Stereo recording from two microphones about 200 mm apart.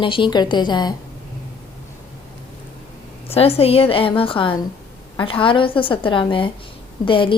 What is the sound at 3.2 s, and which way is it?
A woman's voice, 30° left (ahead or behind).